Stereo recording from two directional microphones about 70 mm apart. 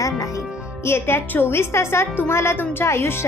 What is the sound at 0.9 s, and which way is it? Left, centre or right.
A woman's voice, left.